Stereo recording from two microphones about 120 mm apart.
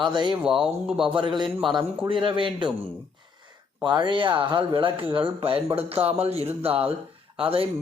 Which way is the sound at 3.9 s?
40° right (ahead or behind).